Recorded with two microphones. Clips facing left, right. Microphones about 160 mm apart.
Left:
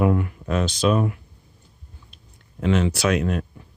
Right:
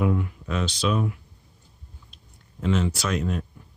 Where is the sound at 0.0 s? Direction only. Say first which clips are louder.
Left 4 dB; 65° left (ahead or behind).